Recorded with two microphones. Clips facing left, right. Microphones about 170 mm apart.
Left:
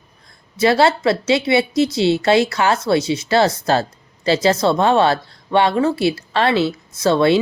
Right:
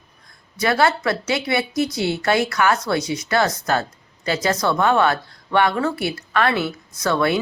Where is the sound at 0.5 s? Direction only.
25° left (ahead or behind).